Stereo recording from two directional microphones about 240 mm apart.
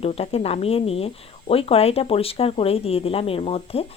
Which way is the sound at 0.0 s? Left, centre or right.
Left.